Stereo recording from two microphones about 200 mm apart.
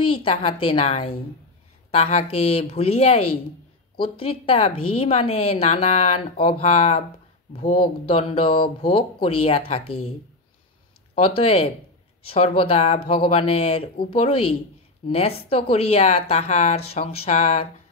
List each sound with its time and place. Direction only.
0.0 s a woman's voice: 25° left (ahead or behind)
11.1 s a woman's voice: 30° left (ahead or behind)